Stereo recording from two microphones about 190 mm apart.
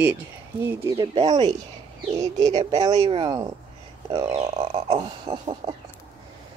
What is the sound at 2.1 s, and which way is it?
Speech, 20° right (ahead or behind).